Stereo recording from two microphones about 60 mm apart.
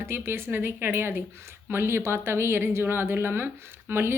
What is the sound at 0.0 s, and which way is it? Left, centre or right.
A woman's voice, right.